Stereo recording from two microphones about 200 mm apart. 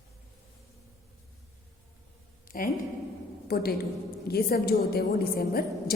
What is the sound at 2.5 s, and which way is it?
A woman's voice, 45° left (ahead or behind).